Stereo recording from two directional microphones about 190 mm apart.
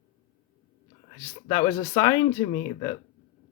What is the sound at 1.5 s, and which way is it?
Speech, 20° left (ahead or behind).